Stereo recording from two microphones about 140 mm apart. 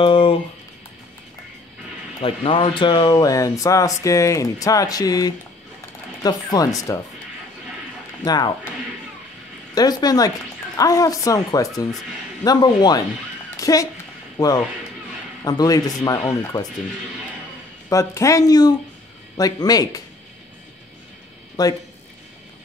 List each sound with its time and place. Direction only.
0.0 s a sound: 40° left (ahead or behind)
2.2 s speech: 40° left (ahead or behind)
8.2 s speech: 30° left (ahead or behind)
9.8 s speech: 30° left (ahead or behind)
13.6 s a sound: 25° left (ahead or behind)
14.4 s speech: 25° left (ahead or behind)
17.8 s speech: 20° left (ahead or behind)
21.6 s speech: 25° left (ahead or behind)